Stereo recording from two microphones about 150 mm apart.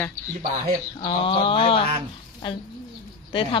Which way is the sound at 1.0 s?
35° left (ahead or behind).